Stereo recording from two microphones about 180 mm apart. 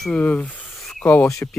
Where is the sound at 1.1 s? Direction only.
15° left (ahead or behind).